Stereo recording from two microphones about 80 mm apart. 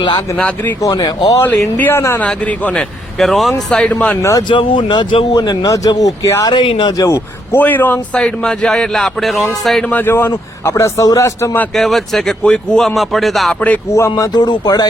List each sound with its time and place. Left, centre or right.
0.8 s speech: left
1.4 s speech: left
3.2 s speech: centre
4.2 s a man's voice: left
4.4 s speech: left
5.4 s a man's voice: left
6.5 s speech: left
6.9 s a man's voice: left
7.5 s speech: left
8.1 s speech: centre
9.9 s a man's voice: left
11.7 s speech: centre
13.9 s a man's voice: left
14.3 s speech: left